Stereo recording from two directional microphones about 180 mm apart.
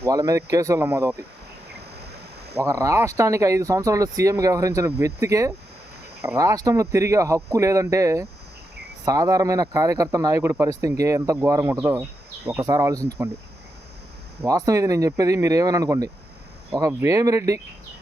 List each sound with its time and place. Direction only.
0.0 s speech: 20° right (ahead or behind)
2.6 s speech: 15° right (ahead or behind)
14.4 s speech: 20° right (ahead or behind)